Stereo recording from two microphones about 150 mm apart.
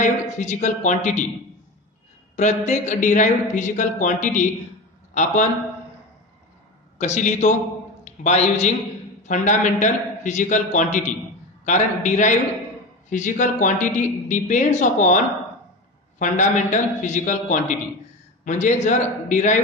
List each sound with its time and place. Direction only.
0.4 s a man's voice: 50° left (ahead or behind)
2.3 s a man's voice: 50° left (ahead or behind)
7.0 s a man's voice: 55° left (ahead or behind)